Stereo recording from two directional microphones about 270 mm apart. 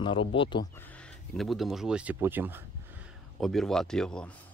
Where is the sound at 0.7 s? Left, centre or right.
Centre.